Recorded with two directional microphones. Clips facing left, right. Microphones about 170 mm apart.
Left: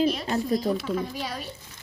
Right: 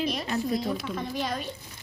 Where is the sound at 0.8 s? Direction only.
5° left (ahead or behind).